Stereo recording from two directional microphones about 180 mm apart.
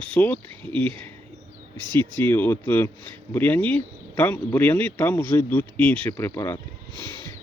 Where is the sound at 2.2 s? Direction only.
10° left (ahead or behind).